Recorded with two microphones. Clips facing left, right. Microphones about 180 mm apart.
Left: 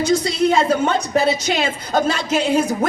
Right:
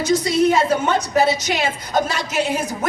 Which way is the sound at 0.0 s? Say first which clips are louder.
Even; 30° left (ahead or behind).